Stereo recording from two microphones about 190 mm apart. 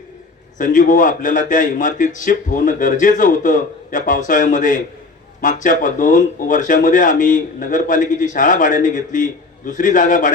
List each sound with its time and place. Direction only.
0.6 s a man's voice: 45° left (ahead or behind)